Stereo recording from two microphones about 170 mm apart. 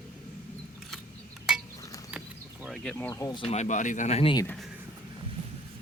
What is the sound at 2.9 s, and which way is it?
Speech, 15° left (ahead or behind).